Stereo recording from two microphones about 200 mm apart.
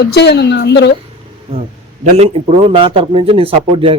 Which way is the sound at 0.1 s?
55° left (ahead or behind).